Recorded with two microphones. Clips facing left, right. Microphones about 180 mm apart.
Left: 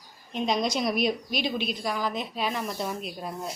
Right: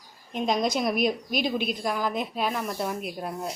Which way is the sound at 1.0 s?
50° right (ahead or behind).